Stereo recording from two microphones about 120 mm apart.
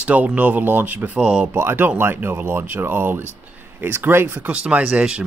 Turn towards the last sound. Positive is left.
turn(degrees=-10)  # may be behind; listen again after turning